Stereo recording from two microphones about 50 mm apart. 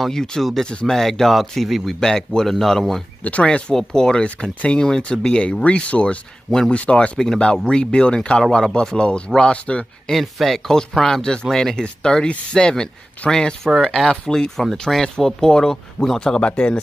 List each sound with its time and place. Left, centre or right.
0.0 s speech: centre
0.9 s speech: centre
3.4 s speech: centre
10.1 s speech: centre
15.1 s speech: centre
16.3 s speech: left